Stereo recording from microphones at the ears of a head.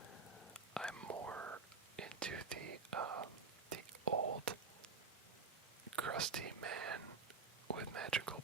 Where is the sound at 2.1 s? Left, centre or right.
Right.